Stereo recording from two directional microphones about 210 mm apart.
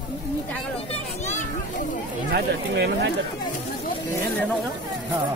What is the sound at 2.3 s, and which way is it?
Speech, 50° right (ahead or behind).